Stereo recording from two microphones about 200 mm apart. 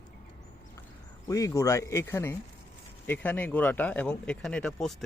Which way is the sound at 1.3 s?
15° left (ahead or behind).